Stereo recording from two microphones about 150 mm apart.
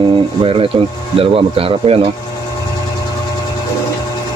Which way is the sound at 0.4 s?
35° right (ahead or behind).